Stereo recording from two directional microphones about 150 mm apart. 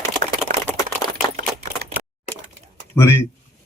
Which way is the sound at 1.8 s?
90° right.